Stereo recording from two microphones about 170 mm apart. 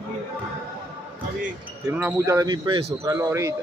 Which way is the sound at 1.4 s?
10° right (ahead or behind).